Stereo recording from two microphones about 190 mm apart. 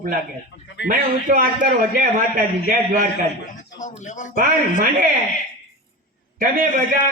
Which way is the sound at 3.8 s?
40° left (ahead or behind).